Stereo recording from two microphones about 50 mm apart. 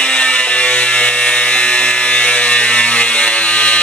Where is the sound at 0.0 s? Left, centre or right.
Left.